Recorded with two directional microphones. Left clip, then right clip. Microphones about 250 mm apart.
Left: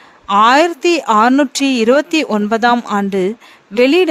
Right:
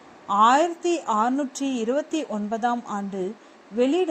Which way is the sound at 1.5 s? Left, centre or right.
Left.